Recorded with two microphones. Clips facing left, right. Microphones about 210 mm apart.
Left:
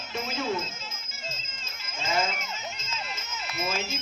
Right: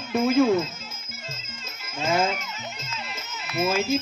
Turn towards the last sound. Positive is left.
turn(degrees=-55)  # may be behind; listen again after turning